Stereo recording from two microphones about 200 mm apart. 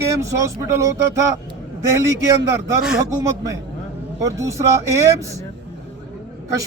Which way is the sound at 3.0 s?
15° right (ahead or behind).